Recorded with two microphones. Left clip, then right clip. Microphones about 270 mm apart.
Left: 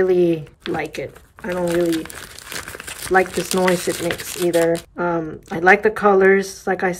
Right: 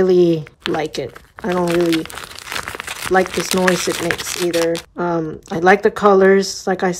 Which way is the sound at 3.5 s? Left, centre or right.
Centre.